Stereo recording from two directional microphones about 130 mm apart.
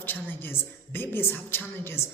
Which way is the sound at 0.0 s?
15° left (ahead or behind).